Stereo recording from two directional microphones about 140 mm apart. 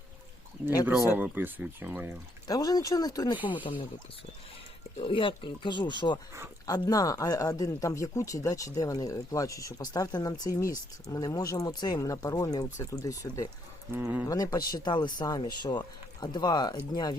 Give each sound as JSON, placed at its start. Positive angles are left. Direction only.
{"t": 1.1, "sound": "speech", "side_deg": -15}
{"t": 2.5, "sound": "speech", "side_deg": 30}
{"t": 4.9, "sound": "speech", "side_deg": 40}
{"t": 13.9, "sound": "speech", "side_deg": -15}
{"t": 14.3, "sound": "speech", "side_deg": 25}